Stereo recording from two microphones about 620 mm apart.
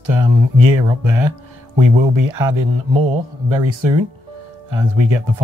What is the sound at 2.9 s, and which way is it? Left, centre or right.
Speech, right.